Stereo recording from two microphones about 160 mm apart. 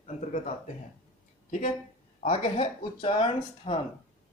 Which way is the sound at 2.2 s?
40° left (ahead or behind).